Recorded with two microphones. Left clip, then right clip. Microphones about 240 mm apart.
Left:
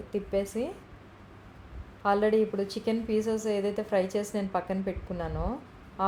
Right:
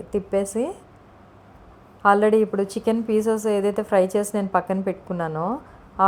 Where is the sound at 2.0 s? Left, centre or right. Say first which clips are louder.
Right 8 dB; right.